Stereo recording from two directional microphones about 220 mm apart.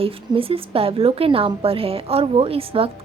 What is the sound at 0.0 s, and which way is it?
A woman's voice, 25° right (ahead or behind).